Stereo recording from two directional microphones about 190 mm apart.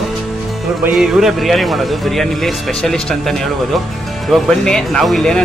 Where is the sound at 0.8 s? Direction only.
5° right (ahead or behind).